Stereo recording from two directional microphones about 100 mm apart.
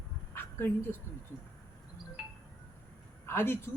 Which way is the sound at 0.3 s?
20° left (ahead or behind).